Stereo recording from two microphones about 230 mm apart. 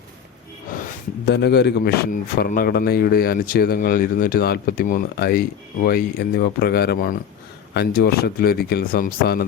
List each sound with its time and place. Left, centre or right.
1.2 s a man's voice: left